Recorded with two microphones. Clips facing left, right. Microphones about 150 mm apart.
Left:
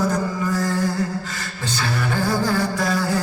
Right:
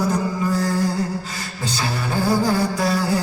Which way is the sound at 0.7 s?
15° right (ahead or behind).